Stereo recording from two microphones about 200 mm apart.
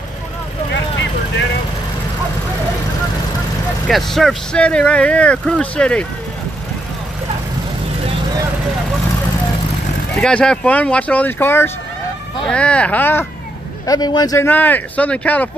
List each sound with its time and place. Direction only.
3.8 s speech: centre (ahead or behind)
10.1 s speech: 5° left (ahead or behind)